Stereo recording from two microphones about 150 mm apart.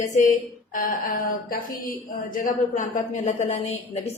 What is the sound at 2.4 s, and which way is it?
Speech, 55° left (ahead or behind).